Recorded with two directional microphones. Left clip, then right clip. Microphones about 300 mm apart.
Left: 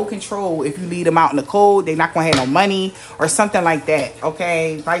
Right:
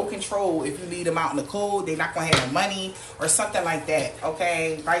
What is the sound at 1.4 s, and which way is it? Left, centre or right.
Speech, centre.